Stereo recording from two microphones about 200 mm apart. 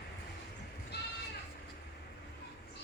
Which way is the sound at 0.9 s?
55° left (ahead or behind).